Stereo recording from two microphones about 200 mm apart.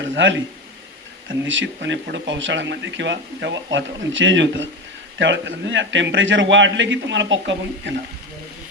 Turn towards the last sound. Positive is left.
turn(degrees=-65)  # may be behind; listen again after turning